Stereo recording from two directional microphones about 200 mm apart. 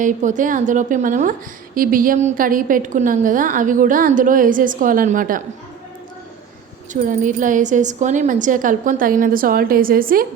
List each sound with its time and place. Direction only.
0.0 s a woman's voice: 40° right (ahead or behind)
6.9 s a woman's voice: 40° right (ahead or behind)